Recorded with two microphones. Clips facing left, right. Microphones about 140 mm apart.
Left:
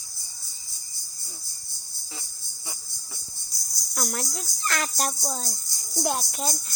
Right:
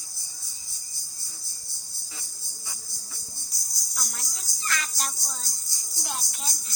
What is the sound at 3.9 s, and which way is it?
Speech, 60° left (ahead or behind).